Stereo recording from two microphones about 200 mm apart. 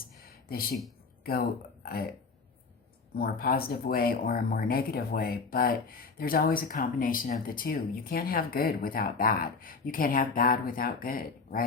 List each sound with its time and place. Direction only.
0.0 s a sound: 45° left (ahead or behind)
1.2 s speech: 50° left (ahead or behind)
3.2 s speech: 50° left (ahead or behind)